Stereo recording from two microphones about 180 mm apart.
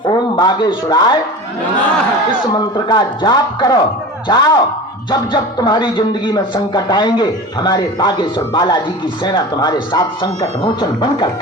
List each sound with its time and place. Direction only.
0.1 s a man's voice: 25° left (ahead or behind)
2.5 s speech: 25° left (ahead or behind)